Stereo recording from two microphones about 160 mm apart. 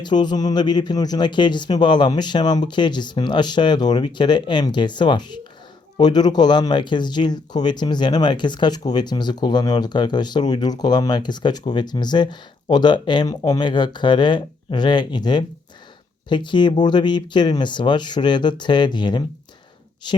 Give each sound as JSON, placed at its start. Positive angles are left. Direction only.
{"t": 0.0, "sound": "speech", "side_deg": 25}